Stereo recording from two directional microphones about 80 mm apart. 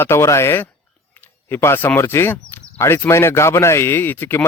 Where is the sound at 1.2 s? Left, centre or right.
Left.